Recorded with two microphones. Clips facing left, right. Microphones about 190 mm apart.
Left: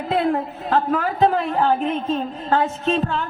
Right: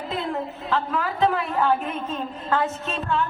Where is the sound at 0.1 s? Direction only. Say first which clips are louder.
Left 8 dB; 55° left (ahead or behind).